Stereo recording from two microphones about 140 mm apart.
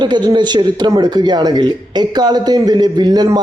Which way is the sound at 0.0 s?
30° right (ahead or behind).